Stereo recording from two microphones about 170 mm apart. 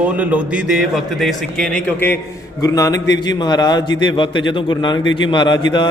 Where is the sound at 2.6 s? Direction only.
20° left (ahead or behind).